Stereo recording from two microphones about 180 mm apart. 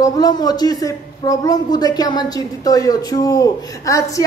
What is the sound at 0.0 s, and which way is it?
A woman's voice, 20° left (ahead or behind).